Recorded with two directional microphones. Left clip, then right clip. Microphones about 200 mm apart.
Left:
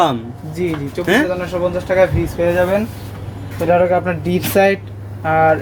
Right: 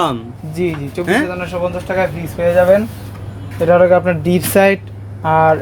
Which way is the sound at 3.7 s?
40° right (ahead or behind).